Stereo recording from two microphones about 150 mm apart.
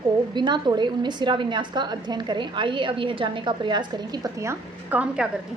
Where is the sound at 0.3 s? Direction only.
30° right (ahead or behind).